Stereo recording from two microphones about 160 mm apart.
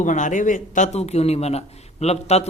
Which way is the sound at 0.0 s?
50° left (ahead or behind).